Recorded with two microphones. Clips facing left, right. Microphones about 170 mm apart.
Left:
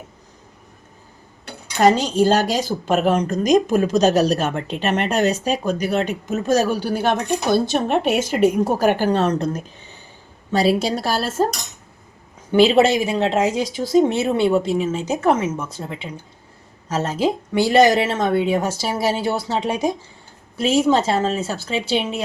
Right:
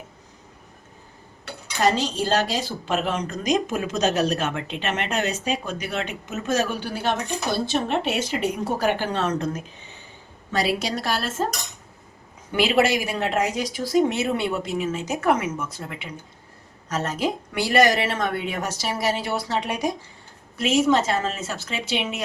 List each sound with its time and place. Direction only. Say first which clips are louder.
1.8 s speech: left 7 dB; 45° left (ahead or behind)
12.5 s speech: left 6 dB; 25° left (ahead or behind)